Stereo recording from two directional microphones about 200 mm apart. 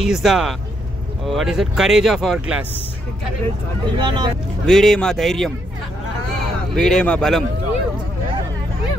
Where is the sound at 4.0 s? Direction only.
25° right (ahead or behind).